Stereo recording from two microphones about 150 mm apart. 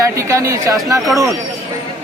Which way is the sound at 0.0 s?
20° right (ahead or behind).